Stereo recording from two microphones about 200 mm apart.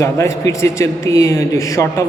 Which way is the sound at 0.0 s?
15° left (ahead or behind).